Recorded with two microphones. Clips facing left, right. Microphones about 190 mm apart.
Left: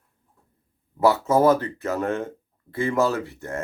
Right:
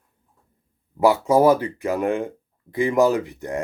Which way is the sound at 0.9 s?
15° right (ahead or behind).